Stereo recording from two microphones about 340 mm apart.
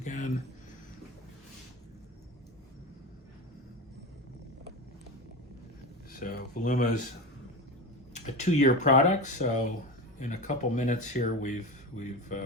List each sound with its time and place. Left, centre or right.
0.0 s speech: left
6.1 s speech: left
8.1 s speech: left